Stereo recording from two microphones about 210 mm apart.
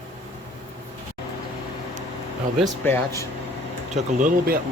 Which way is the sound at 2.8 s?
10° left (ahead or behind).